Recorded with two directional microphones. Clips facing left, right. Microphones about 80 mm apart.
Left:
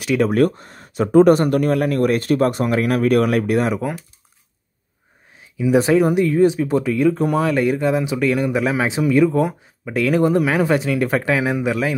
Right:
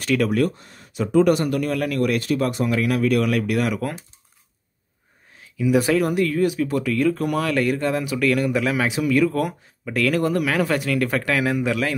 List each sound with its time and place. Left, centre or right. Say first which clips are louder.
0.3 s speech: left 5 dB; left
5.4 s speech: left 3 dB; left